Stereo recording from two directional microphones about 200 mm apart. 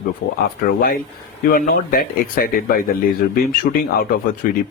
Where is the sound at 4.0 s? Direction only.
45° left (ahead or behind).